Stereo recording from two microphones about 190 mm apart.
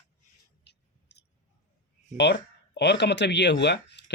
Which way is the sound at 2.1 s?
65° left (ahead or behind).